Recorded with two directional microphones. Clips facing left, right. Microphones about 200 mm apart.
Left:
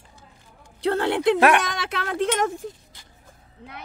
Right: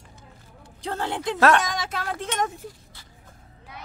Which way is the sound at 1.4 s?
15° left (ahead or behind).